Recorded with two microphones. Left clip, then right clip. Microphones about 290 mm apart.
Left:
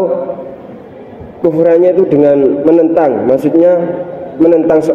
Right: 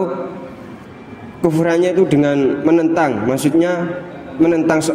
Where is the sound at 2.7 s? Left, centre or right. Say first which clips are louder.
Left 5 dB; right.